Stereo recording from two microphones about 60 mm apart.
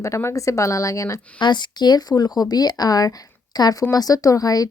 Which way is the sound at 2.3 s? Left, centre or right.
Left.